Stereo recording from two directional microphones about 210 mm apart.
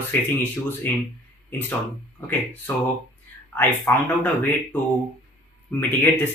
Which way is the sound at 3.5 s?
10° left (ahead or behind).